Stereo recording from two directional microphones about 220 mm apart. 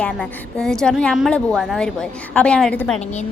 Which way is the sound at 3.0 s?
30° left (ahead or behind).